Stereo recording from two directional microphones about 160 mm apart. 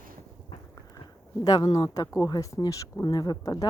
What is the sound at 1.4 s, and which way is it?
Speech, 30° left (ahead or behind).